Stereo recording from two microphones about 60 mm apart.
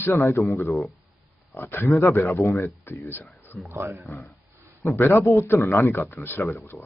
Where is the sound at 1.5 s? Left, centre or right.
Left.